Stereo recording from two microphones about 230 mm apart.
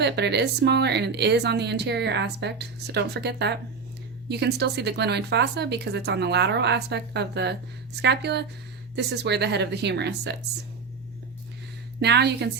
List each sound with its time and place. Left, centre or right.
0.0 s a woman's voice: right
11.9 s a woman's voice: right